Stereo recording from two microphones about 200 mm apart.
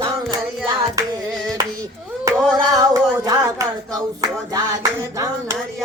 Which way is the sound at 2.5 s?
20° right (ahead or behind).